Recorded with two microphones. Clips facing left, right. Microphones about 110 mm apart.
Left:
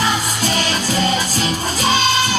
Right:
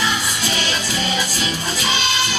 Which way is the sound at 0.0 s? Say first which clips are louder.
Left 3 dB; 45° left (ahead or behind).